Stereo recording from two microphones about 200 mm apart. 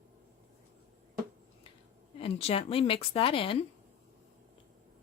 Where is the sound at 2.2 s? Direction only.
30° left (ahead or behind).